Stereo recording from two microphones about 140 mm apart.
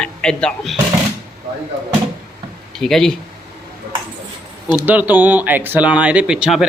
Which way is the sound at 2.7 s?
5° left (ahead or behind).